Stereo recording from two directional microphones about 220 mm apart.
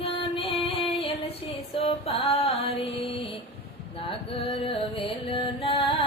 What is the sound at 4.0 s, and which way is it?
Music, 25° left (ahead or behind).